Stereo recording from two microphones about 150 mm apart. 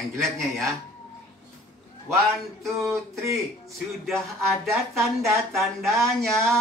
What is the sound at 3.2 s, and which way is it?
Speech, 20° right (ahead or behind).